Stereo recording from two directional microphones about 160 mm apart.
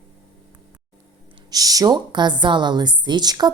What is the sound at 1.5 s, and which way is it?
A woman's voice, 25° right (ahead or behind).